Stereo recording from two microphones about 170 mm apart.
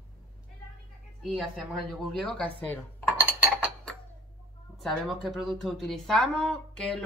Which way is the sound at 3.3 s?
5° right (ahead or behind).